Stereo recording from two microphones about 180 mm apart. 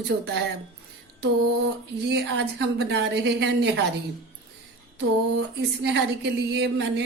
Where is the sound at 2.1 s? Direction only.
75° right (ahead or behind).